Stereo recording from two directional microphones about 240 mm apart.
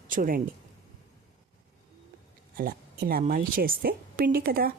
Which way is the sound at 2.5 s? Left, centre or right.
Right.